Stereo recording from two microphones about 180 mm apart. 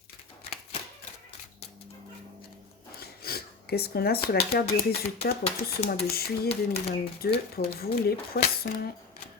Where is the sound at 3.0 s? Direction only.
60° left (ahead or behind).